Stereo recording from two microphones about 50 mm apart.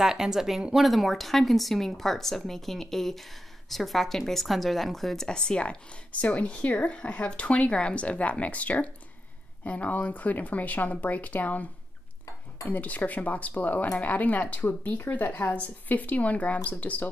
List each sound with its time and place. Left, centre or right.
0.0 s speech: centre; by 11.6 s left
12.6 s speech: left